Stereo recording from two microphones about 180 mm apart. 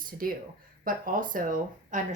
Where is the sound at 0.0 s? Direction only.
50° right (ahead or behind).